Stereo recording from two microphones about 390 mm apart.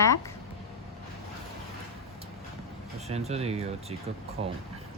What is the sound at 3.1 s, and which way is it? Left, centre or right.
Speech, centre.